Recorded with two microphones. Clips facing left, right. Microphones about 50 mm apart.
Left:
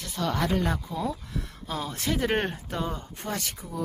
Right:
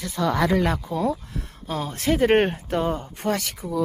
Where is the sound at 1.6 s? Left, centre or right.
Right.